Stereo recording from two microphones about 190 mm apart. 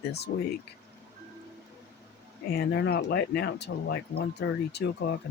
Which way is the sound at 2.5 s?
55° left (ahead or behind).